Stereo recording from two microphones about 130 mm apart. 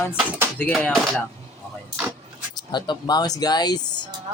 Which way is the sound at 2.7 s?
35° left (ahead or behind).